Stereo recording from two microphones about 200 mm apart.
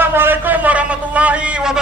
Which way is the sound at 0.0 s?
10° right (ahead or behind).